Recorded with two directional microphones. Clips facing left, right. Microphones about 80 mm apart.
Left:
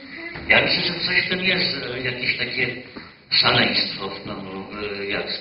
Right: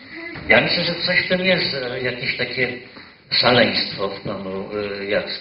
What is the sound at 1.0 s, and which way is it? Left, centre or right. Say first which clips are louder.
A man's voice: right 5 dB; right.